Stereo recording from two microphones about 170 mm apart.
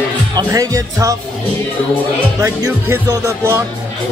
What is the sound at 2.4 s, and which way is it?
Speech, 20° right (ahead or behind).